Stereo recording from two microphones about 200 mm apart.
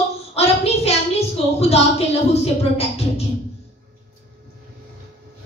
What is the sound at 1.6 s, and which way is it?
Speech, 30° left (ahead or behind).